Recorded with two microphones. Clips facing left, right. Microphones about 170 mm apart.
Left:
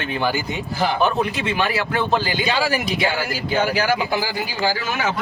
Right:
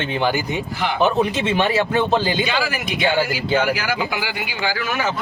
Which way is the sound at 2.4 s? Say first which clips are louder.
Left 2 dB; 35° left (ahead or behind).